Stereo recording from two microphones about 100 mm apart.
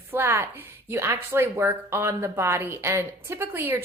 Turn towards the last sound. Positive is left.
turn(degrees=-25)  # may be behind; listen again after turning